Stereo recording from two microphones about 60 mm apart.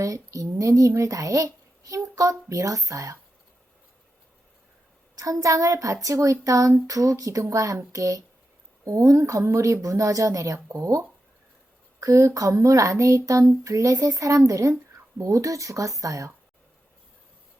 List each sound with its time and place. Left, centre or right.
0.0 s speech: right
2.5 s speech: right
5.1 s speech: right
13.5 s speech: right